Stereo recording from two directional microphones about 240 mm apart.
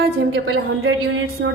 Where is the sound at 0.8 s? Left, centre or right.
Right.